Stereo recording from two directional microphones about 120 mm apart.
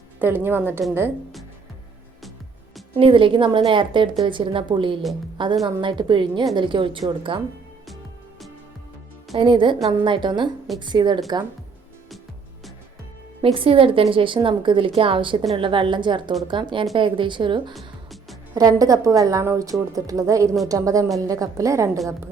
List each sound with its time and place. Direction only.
0.2 s a woman's voice: 15° right (ahead or behind)
2.9 s a woman's voice: 45° right (ahead or behind)
9.3 s a woman's voice: 45° right (ahead or behind)
13.4 s a woman's voice: 50° right (ahead or behind)
17.7 s music: centre (ahead or behind)
18.5 s a woman's voice: 30° right (ahead or behind)